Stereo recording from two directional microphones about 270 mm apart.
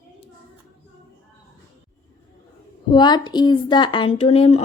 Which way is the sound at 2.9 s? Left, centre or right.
Centre.